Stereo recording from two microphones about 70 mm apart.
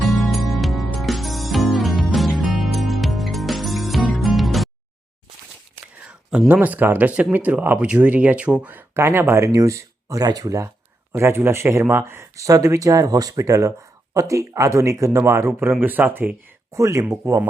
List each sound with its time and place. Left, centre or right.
0.0 s music: centre
6.5 s speech: right
9.0 s speech: right
9.5 s speech: right
11.1 s speech: right
12.4 s speech: right
15.8 s speech: right
16.7 s speech: right